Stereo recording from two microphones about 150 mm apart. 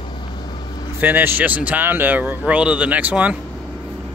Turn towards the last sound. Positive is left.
turn(degrees=-10)  # may be behind; listen again after turning